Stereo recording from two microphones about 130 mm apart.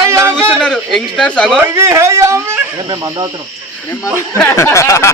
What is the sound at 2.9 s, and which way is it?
Cricket, 35° right (ahead or behind).